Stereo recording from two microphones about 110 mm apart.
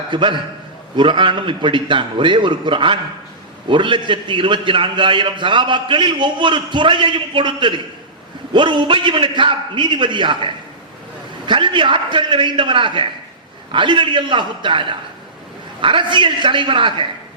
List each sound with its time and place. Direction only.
0.1 s a man's voice: 50° right (ahead or behind)